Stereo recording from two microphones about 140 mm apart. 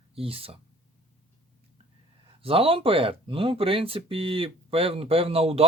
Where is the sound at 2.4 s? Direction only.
40° right (ahead or behind).